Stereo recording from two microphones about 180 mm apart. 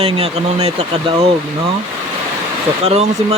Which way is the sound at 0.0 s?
35° right (ahead or behind).